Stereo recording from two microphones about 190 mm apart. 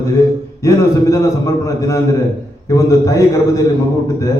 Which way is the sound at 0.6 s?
15° left (ahead or behind).